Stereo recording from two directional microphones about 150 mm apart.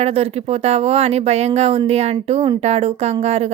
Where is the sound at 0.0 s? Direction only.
40° right (ahead or behind).